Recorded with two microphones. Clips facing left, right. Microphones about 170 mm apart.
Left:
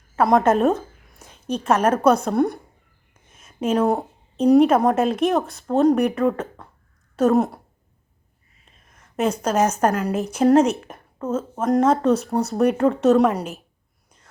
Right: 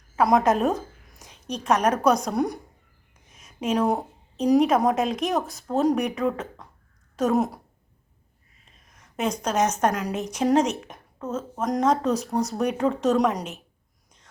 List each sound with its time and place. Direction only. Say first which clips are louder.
0.2 s a woman's voice: left 3 dB; centre (ahead or behind)
3.6 s a woman's voice: left 4 dB; centre (ahead or behind)
9.1 s a woman's voice: left 4 dB; 5° left (ahead or behind)